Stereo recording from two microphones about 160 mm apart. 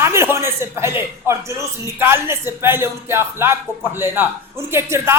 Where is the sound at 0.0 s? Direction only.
15° right (ahead or behind).